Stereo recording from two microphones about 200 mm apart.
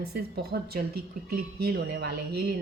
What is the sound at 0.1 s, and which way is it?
Speech, 55° right (ahead or behind).